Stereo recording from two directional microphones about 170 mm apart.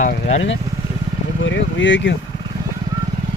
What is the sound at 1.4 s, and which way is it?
Speech, 90° left.